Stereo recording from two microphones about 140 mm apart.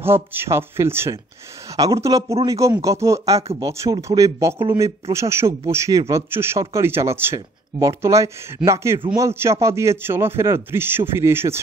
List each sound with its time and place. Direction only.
0.0 s a man's voice: 15° right (ahead or behind)